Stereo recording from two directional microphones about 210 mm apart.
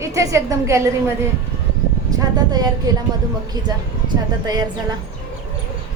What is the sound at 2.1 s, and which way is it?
Speech, 20° right (ahead or behind).